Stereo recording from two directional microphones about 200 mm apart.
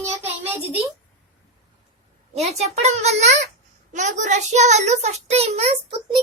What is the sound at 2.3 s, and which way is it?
A child's voice, 30° right (ahead or behind).